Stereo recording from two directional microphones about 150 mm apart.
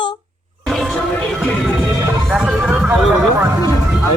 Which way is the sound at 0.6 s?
Centre (ahead or behind).